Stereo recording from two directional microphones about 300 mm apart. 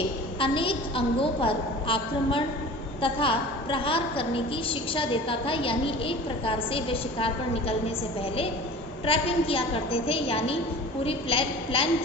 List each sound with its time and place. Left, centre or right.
0.3 s a woman's voice: centre
9.0 s a woman's voice: centre